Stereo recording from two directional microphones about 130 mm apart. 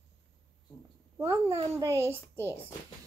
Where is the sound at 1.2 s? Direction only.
25° right (ahead or behind).